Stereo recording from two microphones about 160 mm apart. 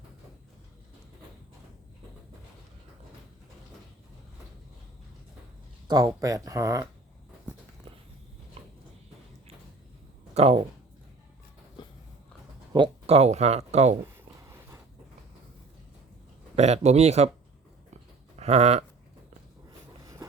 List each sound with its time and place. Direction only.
5.9 s speech: 20° right (ahead or behind)
10.3 s speech: 40° right (ahead or behind)
12.7 s speech: 35° right (ahead or behind)
14.4 s a sound: 15° right (ahead or behind)
16.6 s speech: 45° right (ahead or behind)
17.9 s a sound: 40° right (ahead or behind)